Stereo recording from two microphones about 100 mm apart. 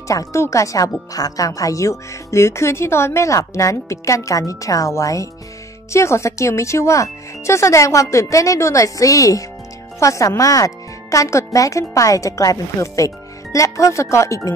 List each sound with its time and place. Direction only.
0.1 s speech: 30° left (ahead or behind)